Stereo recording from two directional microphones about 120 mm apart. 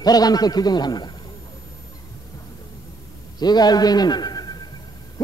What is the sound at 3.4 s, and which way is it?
A man's voice, 35° left (ahead or behind).